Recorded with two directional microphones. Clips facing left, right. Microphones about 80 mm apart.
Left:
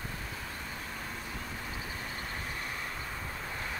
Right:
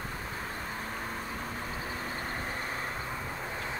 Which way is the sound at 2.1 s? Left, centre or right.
Right.